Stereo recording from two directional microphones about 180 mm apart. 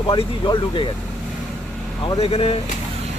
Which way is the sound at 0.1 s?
25° left (ahead or behind).